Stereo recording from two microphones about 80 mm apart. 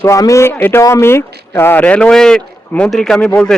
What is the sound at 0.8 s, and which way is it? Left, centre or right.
Speech, left.